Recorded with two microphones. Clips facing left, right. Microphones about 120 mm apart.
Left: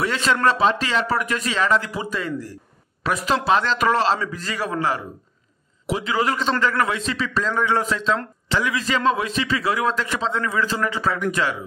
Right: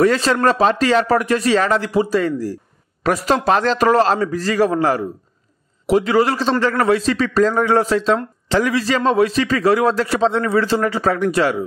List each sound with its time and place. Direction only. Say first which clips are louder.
0.0 s a man's voice: right 6 dB; 40° right (ahead or behind)